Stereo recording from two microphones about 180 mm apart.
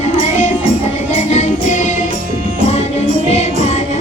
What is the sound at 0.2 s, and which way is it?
Music, 45° left (ahead or behind).